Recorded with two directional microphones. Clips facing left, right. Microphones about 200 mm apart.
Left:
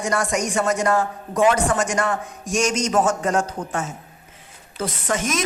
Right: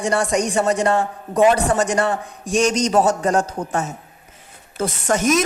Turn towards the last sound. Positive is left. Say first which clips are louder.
# right 6 dB
turn(degrees=-40)  # may be behind; listen again after turning